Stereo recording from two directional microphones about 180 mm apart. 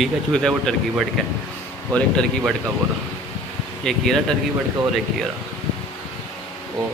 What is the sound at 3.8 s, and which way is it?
Speech, centre (ahead or behind).